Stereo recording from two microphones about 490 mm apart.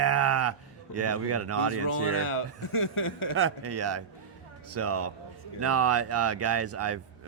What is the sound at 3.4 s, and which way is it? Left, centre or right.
Speech, right.